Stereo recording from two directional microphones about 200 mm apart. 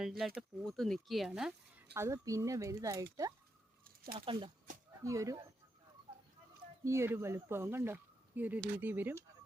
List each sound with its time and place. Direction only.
0.0 s speech: centre (ahead or behind); by 3.3 s 15° right (ahead or behind)
3.8 s a sound: 45° right (ahead or behind)
4.3 s speech: 25° right (ahead or behind)
5.0 s speech: 15° right (ahead or behind)
6.8 s speech: 15° right (ahead or behind)